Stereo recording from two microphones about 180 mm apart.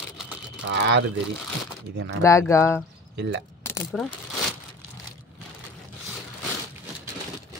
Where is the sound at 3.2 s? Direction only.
80° right.